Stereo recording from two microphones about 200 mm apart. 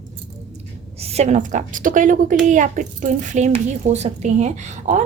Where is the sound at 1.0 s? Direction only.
30° right (ahead or behind).